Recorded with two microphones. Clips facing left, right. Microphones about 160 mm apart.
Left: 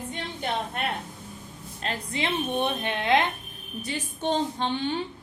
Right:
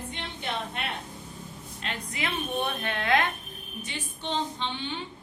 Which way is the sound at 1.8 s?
35° left (ahead or behind).